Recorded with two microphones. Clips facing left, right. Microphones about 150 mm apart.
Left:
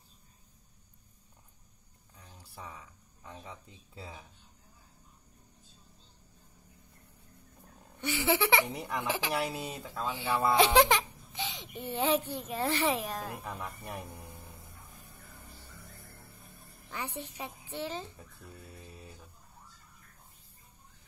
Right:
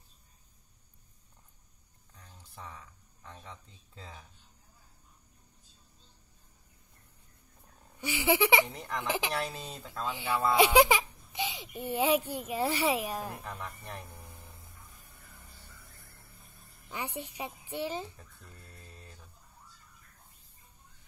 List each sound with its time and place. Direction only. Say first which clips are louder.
2.1 s a sound: left 1 dB; 10° left (ahead or behind)
3.4 s speech: left 2 dB; 10° left (ahead or behind)
8.0 s a woman's voice: right 1 dB; 15° right (ahead or behind)
8.6 s speech: left 2 dB; 10° left (ahead or behind)
9.0 s a woman's voice: right 3 dB; 15° right (ahead or behind)
9.3 s speech: left 2 dB; 10° left (ahead or behind)
10.5 s a woman's voice: right 1 dB; 10° right (ahead or behind)
13.4 s speech: left 1 dB; 5° left (ahead or behind)
16.9 s a woman's voice: right 1 dB; 10° right (ahead or behind)
18.1 s a sound: left 4 dB; 5° left (ahead or behind)